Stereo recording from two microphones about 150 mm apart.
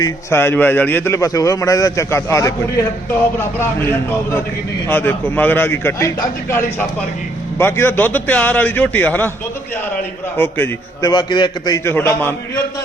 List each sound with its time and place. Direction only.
0.0 s a man's voice: 15° left (ahead or behind)
4.9 s a man's voice: 15° left (ahead or behind)
10.3 s a man's voice: 15° left (ahead or behind)
11.0 s a man's voice: 30° left (ahead or behind)
11.9 s a man's voice: 15° left (ahead or behind)